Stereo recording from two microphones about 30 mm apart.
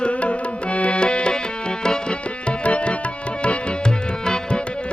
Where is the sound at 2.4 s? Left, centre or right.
Left.